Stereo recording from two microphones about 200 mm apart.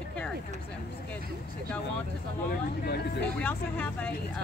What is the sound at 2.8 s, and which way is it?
Speech, 50° left (ahead or behind).